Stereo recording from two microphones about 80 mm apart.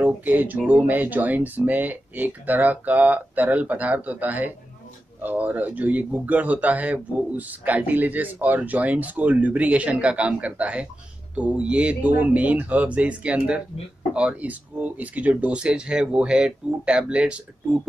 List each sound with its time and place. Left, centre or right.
0.0 s speech: right